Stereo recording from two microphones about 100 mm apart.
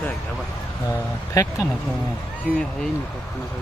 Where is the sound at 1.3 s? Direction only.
30° left (ahead or behind).